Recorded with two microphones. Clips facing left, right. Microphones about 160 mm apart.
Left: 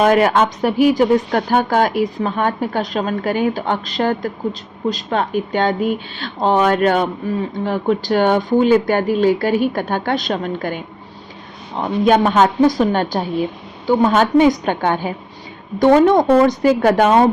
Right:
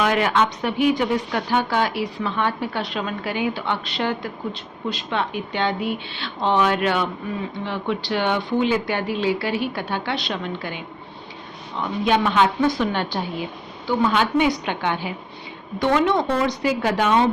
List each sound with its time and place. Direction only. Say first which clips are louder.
0.0 s speech: left 6 dB; 45° left (ahead or behind)